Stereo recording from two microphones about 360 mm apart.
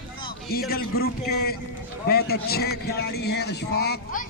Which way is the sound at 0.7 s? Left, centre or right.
Left.